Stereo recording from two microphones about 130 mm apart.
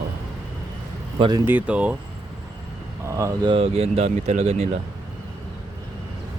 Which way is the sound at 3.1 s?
20° right (ahead or behind).